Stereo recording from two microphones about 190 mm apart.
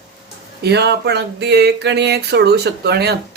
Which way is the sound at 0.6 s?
60° right (ahead or behind).